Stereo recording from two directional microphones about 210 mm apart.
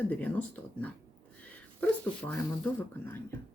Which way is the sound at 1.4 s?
5° left (ahead or behind).